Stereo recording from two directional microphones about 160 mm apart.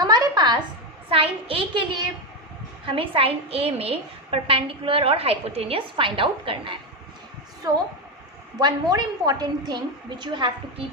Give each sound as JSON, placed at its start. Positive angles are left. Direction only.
{"t": 0.0, "sound": "a sound", "side_deg": -25}
{"t": 1.1, "sound": "a woman's voice", "side_deg": -30}
{"t": 8.5, "sound": "a woman's voice", "side_deg": -25}